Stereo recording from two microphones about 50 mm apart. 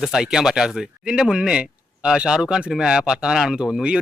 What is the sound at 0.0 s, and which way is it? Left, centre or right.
Speech, centre.